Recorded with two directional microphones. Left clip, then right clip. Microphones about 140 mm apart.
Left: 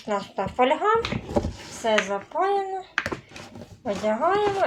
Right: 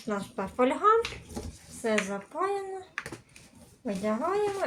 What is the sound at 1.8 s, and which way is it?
Speech, 30° right (ahead or behind).